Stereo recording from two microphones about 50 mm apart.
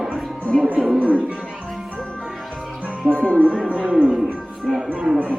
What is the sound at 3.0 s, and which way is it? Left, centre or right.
Speech, right.